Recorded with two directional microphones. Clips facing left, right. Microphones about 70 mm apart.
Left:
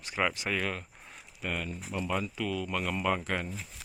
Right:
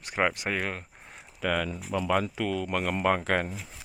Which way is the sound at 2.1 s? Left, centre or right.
Right.